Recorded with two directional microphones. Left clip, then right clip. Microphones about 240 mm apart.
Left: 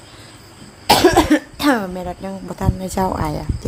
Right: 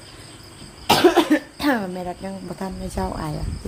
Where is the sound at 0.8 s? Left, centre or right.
Centre.